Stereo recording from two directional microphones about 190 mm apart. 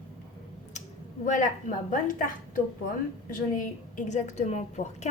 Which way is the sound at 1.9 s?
45° left (ahead or behind).